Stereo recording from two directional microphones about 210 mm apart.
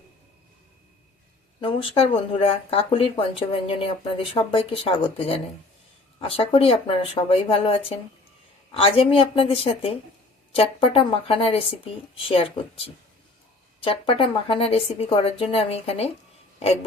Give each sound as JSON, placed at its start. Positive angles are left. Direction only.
{"t": 1.6, "sound": "speech", "side_deg": 25}